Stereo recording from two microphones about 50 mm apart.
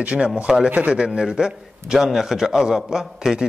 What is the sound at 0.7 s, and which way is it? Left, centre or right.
A man's voice, right.